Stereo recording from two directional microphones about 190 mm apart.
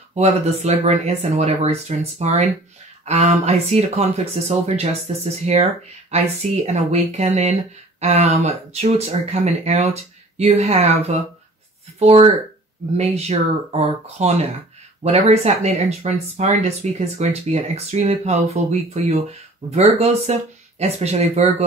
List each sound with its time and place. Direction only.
0.1 s speech: 35° right (ahead or behind)